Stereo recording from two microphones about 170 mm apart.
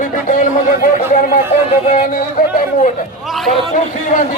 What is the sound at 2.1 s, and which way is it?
Chatter, 55° left (ahead or behind).